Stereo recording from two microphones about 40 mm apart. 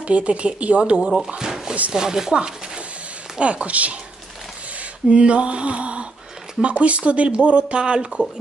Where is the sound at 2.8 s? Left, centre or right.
Right.